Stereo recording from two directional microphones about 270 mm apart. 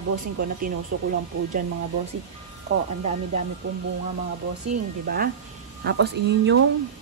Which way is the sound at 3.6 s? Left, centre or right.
Right.